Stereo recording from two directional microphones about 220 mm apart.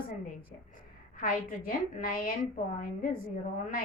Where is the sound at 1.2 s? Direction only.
40° left (ahead or behind).